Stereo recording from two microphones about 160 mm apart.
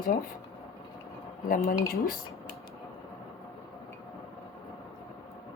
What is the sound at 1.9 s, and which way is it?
Speech, 65° left (ahead or behind).